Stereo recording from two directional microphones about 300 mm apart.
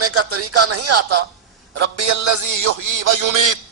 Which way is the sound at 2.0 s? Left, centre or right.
Right.